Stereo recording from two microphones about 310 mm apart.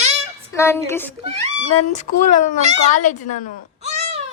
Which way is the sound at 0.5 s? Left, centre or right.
Centre.